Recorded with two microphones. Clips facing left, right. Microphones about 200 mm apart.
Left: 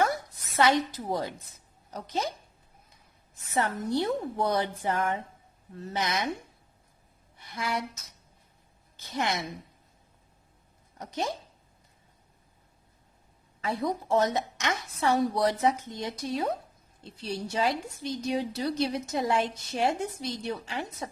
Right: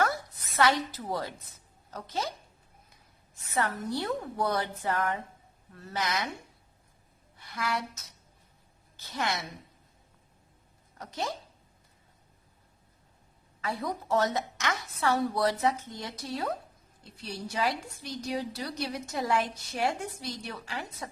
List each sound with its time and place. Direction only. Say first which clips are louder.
0.0 s a sound: left 2 dB; 20° left (ahead or behind)
0.9 s a woman's voice: left 3 dB; 15° left (ahead or behind)
3.5 s a woman's voice: left 3 dB; 20° left (ahead or behind)
7.3 s a woman's voice: left 1 dB; 20° left (ahead or behind)
10.9 s speech: left 3 dB; 20° left (ahead or behind)
13.6 s a woman's voice: left 4 dB; 20° left (ahead or behind)